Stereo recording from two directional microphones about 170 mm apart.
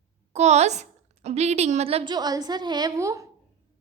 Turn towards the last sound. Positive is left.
turn(degrees=-20)  # may be behind; listen again after turning